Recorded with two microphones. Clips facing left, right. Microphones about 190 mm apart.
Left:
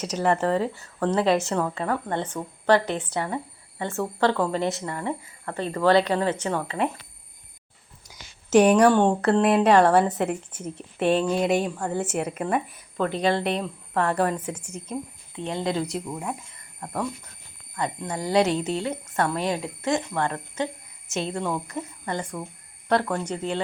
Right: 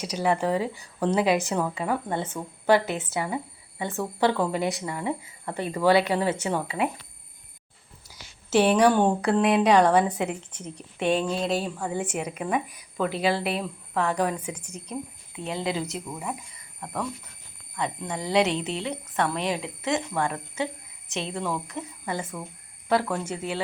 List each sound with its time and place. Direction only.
0.0 s a woman's voice: 10° right (ahead or behind)
8.4 s speech: 5° right (ahead or behind)
11.3 s speech: 20° left (ahead or behind)
11.6 s a woman's voice: 5° right (ahead or behind)
12.1 s speech: 5° left (ahead or behind)
14.5 s speech: 10° left (ahead or behind)
15.4 s speech: 5° right (ahead or behind)
17.7 s speech: centre (ahead or behind)